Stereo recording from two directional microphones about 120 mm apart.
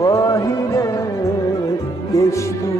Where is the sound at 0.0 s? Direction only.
30° left (ahead or behind).